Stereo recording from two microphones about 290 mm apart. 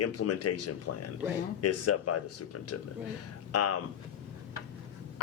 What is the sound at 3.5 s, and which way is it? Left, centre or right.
Speech, left.